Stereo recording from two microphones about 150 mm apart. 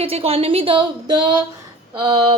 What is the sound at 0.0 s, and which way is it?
A woman's voice, 40° right (ahead or behind).